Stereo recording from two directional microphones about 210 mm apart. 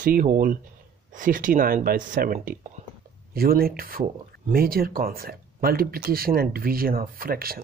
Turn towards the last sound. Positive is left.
turn(degrees=-45)  # may be behind; listen again after turning